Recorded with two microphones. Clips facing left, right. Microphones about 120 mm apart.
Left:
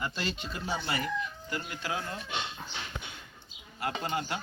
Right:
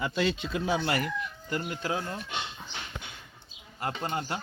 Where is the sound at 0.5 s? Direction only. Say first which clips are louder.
Right 5 dB; 80° right.